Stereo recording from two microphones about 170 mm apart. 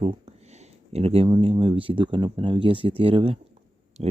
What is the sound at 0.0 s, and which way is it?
Speech, 35° right (ahead or behind).